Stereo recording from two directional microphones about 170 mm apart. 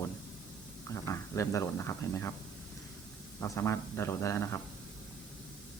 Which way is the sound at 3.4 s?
15° left (ahead or behind).